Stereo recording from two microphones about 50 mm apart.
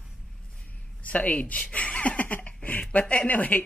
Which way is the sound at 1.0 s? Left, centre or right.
Left.